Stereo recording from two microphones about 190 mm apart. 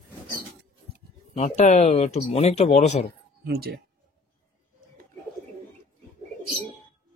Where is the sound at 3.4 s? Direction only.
55° right (ahead or behind).